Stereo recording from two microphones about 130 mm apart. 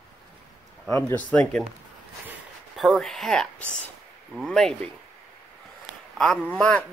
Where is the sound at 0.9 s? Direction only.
15° left (ahead or behind).